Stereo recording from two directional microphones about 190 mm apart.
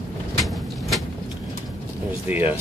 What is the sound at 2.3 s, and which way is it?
Speech, 10° right (ahead or behind).